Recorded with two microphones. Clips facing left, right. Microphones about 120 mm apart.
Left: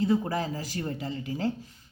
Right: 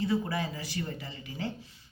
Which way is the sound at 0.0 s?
45° left (ahead or behind).